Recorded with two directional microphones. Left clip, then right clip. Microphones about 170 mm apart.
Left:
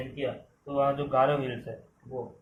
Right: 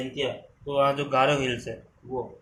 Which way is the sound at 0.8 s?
45° right (ahead or behind).